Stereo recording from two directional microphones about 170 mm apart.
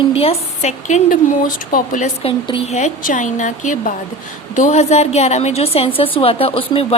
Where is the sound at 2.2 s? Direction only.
40° left (ahead or behind).